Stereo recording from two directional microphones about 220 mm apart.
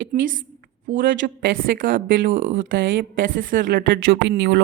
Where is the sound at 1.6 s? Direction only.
40° right (ahead or behind).